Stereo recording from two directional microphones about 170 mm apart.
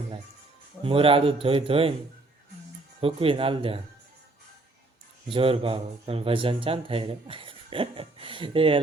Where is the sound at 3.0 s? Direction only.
35° right (ahead or behind).